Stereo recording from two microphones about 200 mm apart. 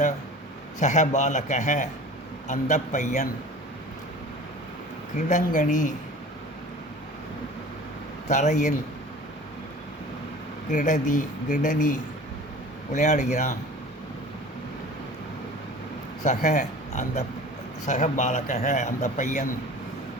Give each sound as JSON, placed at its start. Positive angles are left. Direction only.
{"t": 0.8, "sound": "a man's voice", "side_deg": 35}
{"t": 5.1, "sound": "a man's voice", "side_deg": 40}
{"t": 8.3, "sound": "a man's voice", "side_deg": 35}
{"t": 10.7, "sound": "a man's voice", "side_deg": 40}
{"t": 16.2, "sound": "a man's voice", "side_deg": 35}